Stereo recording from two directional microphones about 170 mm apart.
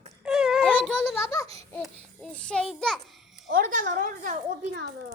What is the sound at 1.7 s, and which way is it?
Child singing, 5° left (ahead or behind).